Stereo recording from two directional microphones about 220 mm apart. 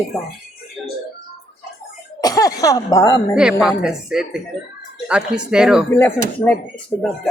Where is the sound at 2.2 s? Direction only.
15° left (ahead or behind).